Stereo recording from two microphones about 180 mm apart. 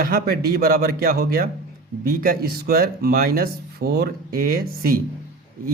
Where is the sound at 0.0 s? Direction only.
60° right (ahead or behind).